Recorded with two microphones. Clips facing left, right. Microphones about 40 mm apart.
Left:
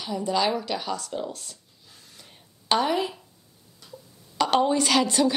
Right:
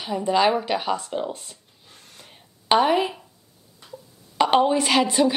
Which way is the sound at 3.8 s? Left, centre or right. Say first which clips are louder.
Right 4 dB; right.